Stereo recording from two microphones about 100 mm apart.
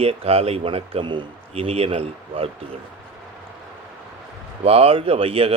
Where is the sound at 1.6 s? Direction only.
75° right (ahead or behind).